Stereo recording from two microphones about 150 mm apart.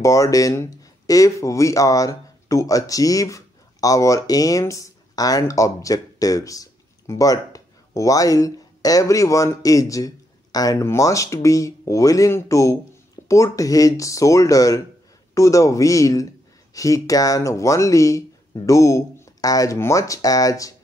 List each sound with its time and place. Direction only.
0.0 s speech: 20° left (ahead or behind)